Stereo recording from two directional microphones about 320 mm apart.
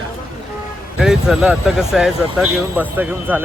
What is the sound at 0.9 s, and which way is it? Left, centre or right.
Speech, centre.